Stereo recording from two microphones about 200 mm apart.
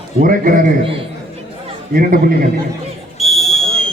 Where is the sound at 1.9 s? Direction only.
45° right (ahead or behind).